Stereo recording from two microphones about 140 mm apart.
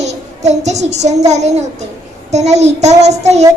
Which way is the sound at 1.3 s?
55° right (ahead or behind).